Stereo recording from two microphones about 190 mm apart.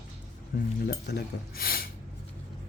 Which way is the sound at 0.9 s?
60° left (ahead or behind).